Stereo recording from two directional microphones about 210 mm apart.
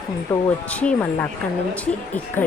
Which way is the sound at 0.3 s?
10° left (ahead or behind).